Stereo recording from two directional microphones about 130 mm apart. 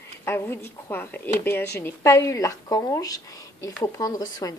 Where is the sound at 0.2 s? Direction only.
20° left (ahead or behind).